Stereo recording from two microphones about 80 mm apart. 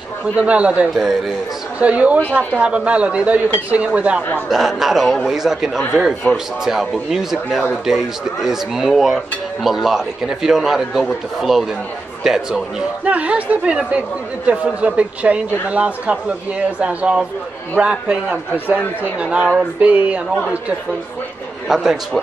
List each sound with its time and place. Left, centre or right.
0.4 s speech: centre
4.5 s speech: centre
19.5 s a sound: right
21.6 s speech: centre